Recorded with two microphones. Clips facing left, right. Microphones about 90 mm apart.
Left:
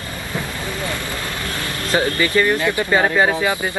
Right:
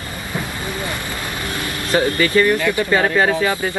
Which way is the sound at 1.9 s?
20° left (ahead or behind).